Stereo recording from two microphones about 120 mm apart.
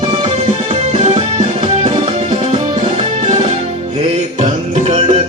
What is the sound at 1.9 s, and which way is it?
Music, 50° right (ahead or behind).